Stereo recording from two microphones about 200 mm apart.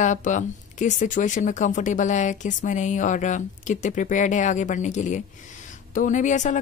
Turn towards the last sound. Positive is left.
turn(degrees=40)  # may be behind; listen again after turning